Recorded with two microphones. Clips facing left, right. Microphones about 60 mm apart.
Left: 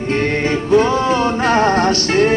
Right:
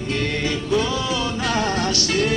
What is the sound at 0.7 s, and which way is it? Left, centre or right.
Music, left.